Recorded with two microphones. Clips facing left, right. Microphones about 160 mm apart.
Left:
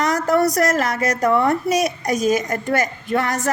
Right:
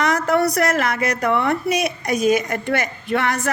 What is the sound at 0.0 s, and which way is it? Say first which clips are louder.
A woman's voice: left 1 dB; 40° left (ahead or behind).